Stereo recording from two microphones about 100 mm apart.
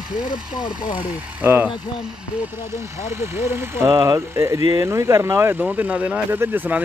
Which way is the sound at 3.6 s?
30° right (ahead or behind).